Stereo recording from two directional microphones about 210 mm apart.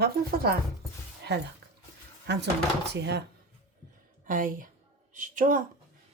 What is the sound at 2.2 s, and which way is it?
Speech, 55° right (ahead or behind).